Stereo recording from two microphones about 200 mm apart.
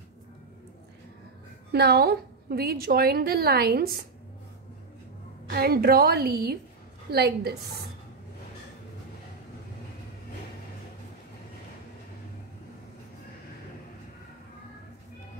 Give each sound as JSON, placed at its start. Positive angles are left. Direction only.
{"t": 1.7, "sound": "a woman's voice", "side_deg": -55}
{"t": 5.5, "sound": "a woman's voice", "side_deg": -50}